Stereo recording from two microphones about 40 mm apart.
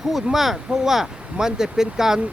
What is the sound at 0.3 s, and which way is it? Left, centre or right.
Speech, centre.